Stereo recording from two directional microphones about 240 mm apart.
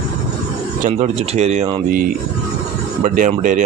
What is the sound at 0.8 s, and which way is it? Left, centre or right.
Speech, right.